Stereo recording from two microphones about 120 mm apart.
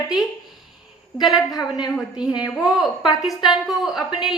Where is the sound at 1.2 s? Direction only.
Centre (ahead or behind).